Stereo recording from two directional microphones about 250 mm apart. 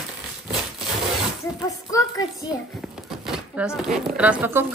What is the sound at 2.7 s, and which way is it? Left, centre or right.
Speech, centre.